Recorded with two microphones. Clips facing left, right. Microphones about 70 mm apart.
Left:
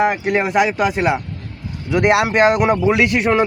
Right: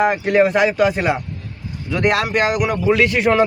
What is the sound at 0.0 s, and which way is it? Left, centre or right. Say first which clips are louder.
Speech: right 2 dB; centre.